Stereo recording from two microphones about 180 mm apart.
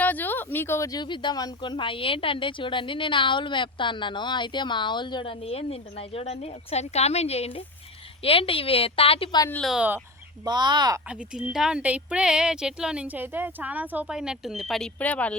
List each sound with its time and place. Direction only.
0.0 s a woman's voice: 10° left (ahead or behind); by 9.5 s 25° left (ahead or behind)
9.5 s a woman's voice: centre (ahead or behind)
10.4 s speech: 25° right (ahead or behind)
11.5 s a woman's voice: 5° right (ahead or behind)